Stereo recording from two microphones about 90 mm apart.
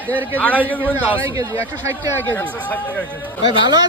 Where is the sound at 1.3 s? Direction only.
35° right (ahead or behind).